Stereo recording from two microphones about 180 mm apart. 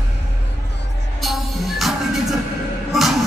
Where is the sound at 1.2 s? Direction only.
Centre (ahead or behind).